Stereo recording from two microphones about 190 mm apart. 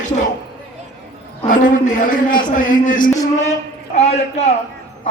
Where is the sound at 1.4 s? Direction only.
40° left (ahead or behind).